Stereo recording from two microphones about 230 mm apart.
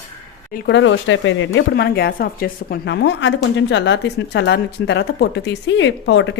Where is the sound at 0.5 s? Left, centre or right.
Left.